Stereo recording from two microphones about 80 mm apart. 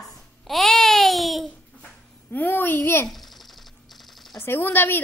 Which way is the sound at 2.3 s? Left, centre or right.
Left.